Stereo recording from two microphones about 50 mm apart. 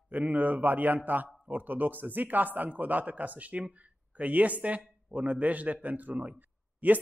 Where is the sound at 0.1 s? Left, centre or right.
Right.